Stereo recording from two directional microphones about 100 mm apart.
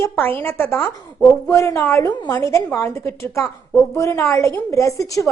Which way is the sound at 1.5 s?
30° left (ahead or behind).